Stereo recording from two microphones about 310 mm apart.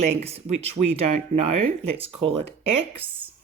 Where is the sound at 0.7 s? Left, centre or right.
Right.